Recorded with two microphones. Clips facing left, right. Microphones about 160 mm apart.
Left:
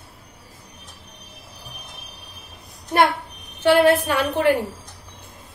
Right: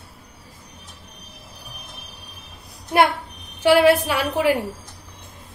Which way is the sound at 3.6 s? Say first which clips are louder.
Right 1 dB; 10° right (ahead or behind).